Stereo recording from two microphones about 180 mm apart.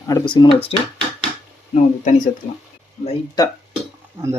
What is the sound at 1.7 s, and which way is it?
Speech, 40° left (ahead or behind).